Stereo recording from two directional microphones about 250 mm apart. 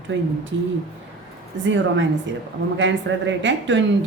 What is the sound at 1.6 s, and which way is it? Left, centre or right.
A woman's voice, right.